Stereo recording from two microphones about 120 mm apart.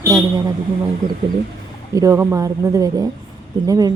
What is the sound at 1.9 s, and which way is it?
Speech, 25° right (ahead or behind).